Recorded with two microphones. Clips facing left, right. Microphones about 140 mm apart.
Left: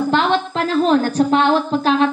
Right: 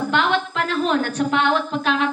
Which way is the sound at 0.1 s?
35° left (ahead or behind).